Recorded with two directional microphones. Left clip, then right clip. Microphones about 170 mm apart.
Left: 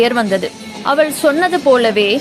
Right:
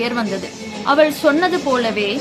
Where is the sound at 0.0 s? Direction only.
45° left (ahead or behind).